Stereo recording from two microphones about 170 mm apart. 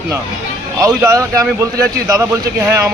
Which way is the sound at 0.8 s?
15° right (ahead or behind).